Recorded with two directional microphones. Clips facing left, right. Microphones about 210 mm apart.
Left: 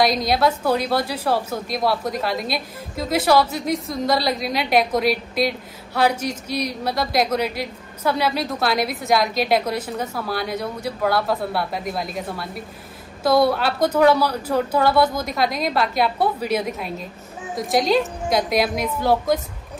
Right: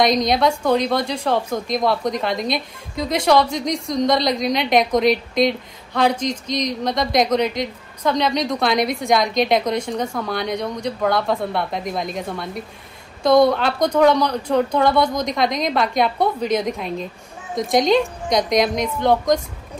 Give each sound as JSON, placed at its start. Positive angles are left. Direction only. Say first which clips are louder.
{"t": 0.0, "sound": "speech", "louder": "right 2 dB", "side_deg": 5}